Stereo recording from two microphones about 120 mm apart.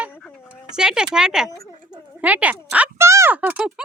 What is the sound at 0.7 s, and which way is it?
Speech, 5° right (ahead or behind).